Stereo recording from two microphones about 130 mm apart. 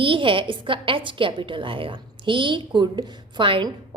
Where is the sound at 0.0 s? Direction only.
40° right (ahead or behind).